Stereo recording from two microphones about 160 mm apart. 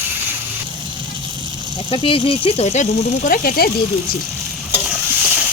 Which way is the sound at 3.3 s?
65° left (ahead or behind).